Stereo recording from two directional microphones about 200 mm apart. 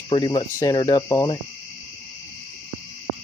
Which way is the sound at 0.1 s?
20° left (ahead or behind).